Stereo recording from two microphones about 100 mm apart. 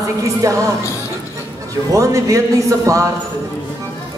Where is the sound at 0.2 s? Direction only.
35° right (ahead or behind).